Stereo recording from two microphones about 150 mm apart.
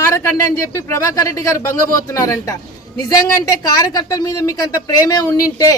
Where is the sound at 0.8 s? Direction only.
20° left (ahead or behind).